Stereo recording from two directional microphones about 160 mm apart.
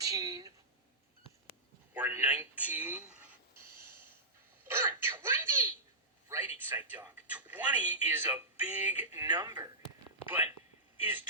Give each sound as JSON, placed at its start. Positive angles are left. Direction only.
{"t": 0.0, "sound": "a sound", "side_deg": -20}
{"t": 1.9, "sound": "speech", "side_deg": -10}
{"t": 4.7, "sound": "a sound", "side_deg": -15}
{"t": 6.2, "sound": "speech", "side_deg": -15}
{"t": 9.2, "sound": "speech", "side_deg": -30}
{"t": 10.2, "sound": "a man's voice", "side_deg": -10}